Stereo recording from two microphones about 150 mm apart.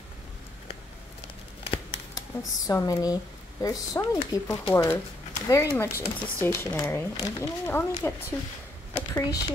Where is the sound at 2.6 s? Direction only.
25° left (ahead or behind).